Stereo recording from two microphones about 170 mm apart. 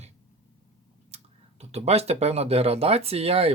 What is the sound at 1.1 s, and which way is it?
Speech, 40° right (ahead or behind).